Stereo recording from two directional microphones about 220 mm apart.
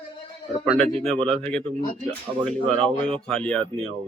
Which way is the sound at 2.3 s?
15° right (ahead or behind).